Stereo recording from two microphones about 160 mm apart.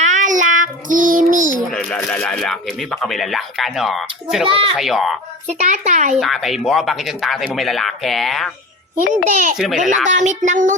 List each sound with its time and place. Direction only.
0.0 s child singing: 50° right (ahead or behind)
1.7 s speech: 5° left (ahead or behind)
4.4 s a child's voice: 35° right (ahead or behind)
4.7 s speech: centre (ahead or behind)
5.5 s a child's voice: 50° right (ahead or behind)
6.1 s speech: centre (ahead or behind)
9.3 s a child's voice: 55° right (ahead or behind)
9.6 s speech: centre (ahead or behind)
10.1 s a child's voice: 50° right (ahead or behind)